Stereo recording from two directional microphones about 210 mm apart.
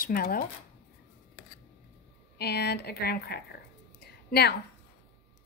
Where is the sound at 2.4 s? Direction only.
50° left (ahead or behind).